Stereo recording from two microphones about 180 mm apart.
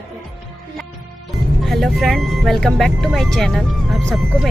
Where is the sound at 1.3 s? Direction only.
Centre (ahead or behind).